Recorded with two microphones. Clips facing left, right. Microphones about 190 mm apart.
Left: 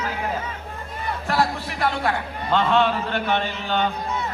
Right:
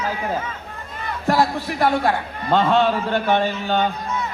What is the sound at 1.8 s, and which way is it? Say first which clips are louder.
Speech: right 4 dB; 45° right (ahead or behind).